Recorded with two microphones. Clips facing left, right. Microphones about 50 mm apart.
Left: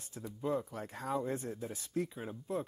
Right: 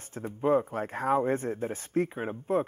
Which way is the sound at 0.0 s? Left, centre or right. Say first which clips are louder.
Right 9 dB; right.